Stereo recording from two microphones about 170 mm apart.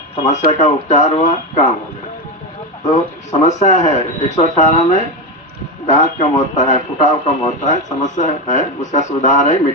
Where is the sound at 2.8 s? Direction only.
45° left (ahead or behind).